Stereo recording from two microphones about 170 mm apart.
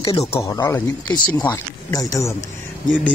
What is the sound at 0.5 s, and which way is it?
Speech, 20° left (ahead or behind).